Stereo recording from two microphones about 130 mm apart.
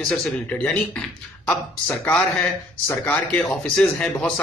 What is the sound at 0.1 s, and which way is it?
Speech, 10° left (ahead or behind).